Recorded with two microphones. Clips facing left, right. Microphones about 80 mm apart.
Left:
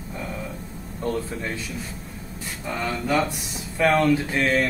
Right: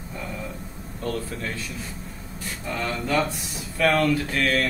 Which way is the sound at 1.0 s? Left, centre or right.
Centre.